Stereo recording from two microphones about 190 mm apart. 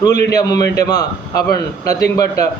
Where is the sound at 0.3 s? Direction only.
20° left (ahead or behind).